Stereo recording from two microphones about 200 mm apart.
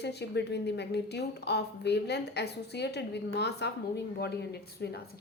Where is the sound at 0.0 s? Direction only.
55° left (ahead or behind).